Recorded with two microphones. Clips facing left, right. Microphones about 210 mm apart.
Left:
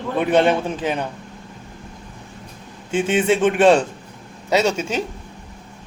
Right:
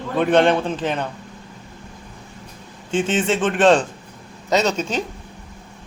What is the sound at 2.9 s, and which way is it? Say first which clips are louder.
Speech: left 2 dB; 10° left (ahead or behind).